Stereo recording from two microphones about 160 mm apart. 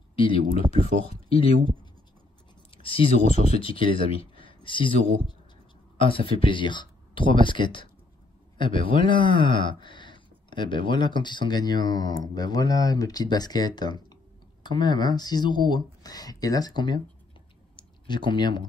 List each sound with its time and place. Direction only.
0.1 s a sound: 35° left (ahead or behind)
1.0 s speech: 35° left (ahead or behind)
2.8 s speech: 35° left (ahead or behind)
5.9 s speech: 35° left (ahead or behind)
17.7 s clicking: 30° left (ahead or behind)